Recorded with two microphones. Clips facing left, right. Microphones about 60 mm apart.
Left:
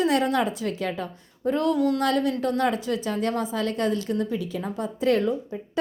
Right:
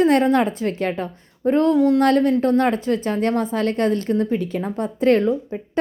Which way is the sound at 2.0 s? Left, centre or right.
Right.